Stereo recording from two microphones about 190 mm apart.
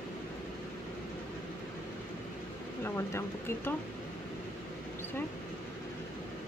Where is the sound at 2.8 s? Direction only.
15° left (ahead or behind).